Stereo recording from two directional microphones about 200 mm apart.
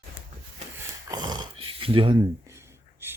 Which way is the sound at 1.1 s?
20° right (ahead or behind).